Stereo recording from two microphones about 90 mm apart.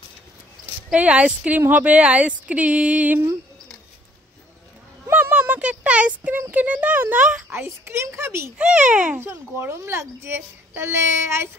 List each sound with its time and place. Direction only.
0.9 s speech: 15° right (ahead or behind)
5.1 s speech: 20° right (ahead or behind)
7.5 s a child's voice: 30° right (ahead or behind)
8.5 s speech: 10° right (ahead or behind)
9.2 s a child's voice: 25° right (ahead or behind)